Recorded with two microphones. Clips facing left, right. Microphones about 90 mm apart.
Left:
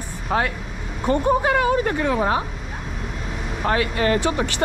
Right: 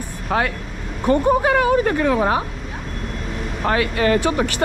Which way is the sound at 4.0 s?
45° right (ahead or behind).